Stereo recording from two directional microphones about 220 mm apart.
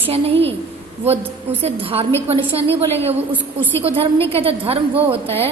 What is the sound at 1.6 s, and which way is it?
Speech, 25° right (ahead or behind).